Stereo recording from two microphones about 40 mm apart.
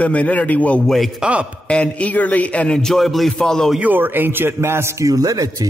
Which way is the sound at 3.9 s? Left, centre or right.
Right.